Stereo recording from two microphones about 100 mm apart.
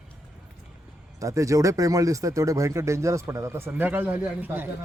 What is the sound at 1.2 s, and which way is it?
Speech, 30° right (ahead or behind).